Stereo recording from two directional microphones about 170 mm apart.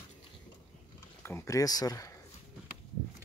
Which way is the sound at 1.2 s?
15° left (ahead or behind).